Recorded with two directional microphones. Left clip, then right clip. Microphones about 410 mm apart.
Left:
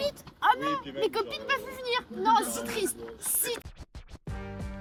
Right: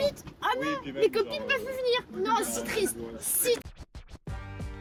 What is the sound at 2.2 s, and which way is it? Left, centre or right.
Speech, centre.